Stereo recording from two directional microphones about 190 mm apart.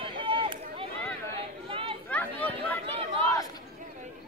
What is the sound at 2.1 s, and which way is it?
Chatter, 10° left (ahead or behind).